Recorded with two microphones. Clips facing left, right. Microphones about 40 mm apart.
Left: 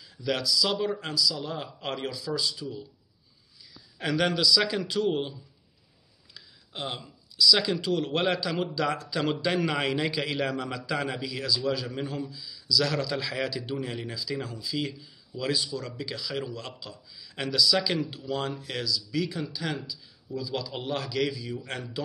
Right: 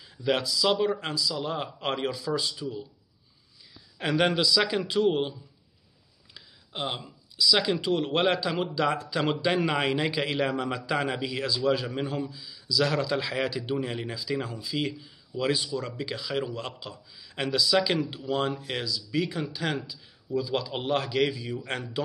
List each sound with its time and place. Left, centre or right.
0.0 s speech: right
1.4 s a man's voice: right
4.0 s a man's voice: centre
6.3 s a sound: centre
7.7 s a man's voice: right
10.5 s a man's voice: right
11.1 s a man's voice: centre
11.3 s a man's voice: right